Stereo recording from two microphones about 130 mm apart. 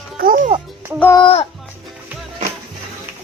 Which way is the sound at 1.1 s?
45° left (ahead or behind).